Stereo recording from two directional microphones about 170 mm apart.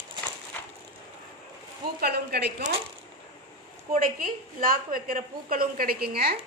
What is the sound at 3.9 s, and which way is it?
A woman's voice, 55° right (ahead or behind).